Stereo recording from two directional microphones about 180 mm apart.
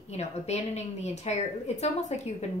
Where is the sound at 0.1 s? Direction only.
40° left (ahead or behind).